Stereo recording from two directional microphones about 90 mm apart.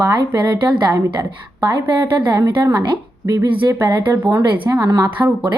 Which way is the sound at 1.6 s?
45° right (ahead or behind).